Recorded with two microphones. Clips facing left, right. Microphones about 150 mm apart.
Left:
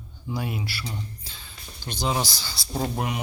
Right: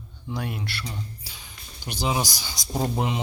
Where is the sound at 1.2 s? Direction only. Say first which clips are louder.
Even; 15° right (ahead or behind).